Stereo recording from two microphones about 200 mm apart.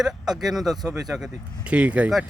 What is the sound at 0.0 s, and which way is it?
Speech, centre (ahead or behind).